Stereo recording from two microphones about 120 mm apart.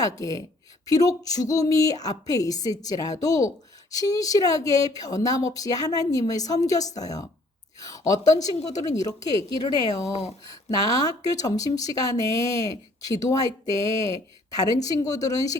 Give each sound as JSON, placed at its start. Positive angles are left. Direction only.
{"t": 0.0, "sound": "a woman's voice", "side_deg": 30}
{"t": 10.1, "sound": "speech", "side_deg": 65}
{"t": 10.5, "sound": "a woman's voice", "side_deg": 30}